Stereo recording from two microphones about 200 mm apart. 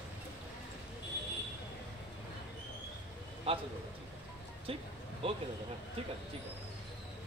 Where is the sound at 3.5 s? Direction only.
30° right (ahead or behind).